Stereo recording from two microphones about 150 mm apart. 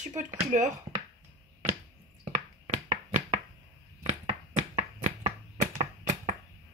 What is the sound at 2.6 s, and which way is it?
Chopping, 40° right (ahead or behind).